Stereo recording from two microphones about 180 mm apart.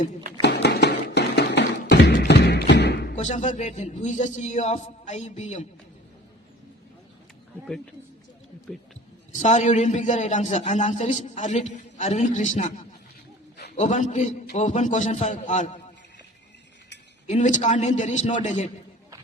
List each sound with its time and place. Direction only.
0.4 s tap: 65° left (ahead or behind)
3.2 s a man's voice: 40° left (ahead or behind)
9.3 s a man's voice: 40° left (ahead or behind)
13.7 s a man's voice: 40° left (ahead or behind)
17.2 s a man's voice: 40° left (ahead or behind)